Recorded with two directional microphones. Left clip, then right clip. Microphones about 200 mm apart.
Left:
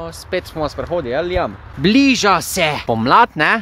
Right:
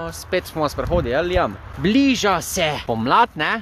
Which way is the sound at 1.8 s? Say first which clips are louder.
Left 4 dB; 30° left (ahead or behind).